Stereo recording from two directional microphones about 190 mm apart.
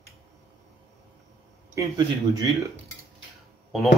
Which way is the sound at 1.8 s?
20° right (ahead or behind).